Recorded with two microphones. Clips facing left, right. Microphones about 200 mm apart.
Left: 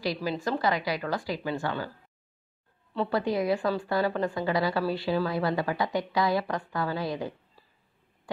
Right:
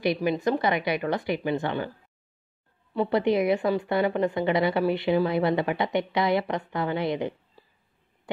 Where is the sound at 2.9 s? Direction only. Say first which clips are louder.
Right 4 dB; 15° right (ahead or behind).